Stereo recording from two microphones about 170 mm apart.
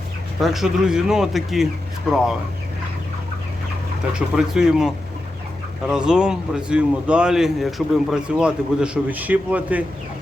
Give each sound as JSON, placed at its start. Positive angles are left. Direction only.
{"t": 0.4, "sound": "speech", "side_deg": 0}
{"t": 4.1, "sound": "a man's voice", "side_deg": -5}